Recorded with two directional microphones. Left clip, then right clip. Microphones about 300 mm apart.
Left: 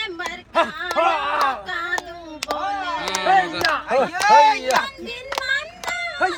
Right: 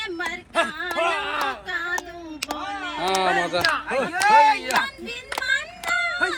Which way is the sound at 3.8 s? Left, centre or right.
Left.